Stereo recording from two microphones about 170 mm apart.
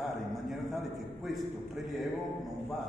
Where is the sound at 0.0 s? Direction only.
Centre (ahead or behind).